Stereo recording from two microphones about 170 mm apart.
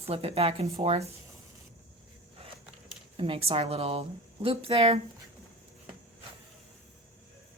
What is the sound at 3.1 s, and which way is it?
Speech, 30° right (ahead or behind).